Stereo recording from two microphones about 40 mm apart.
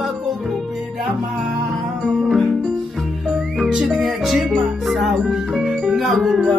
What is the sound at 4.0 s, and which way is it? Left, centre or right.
Music, centre.